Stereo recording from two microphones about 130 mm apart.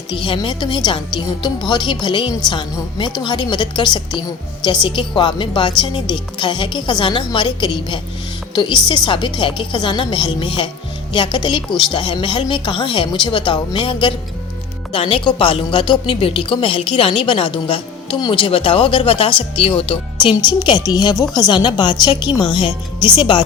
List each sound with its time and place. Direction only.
0.1 s a woman's voice: 40° left (ahead or behind)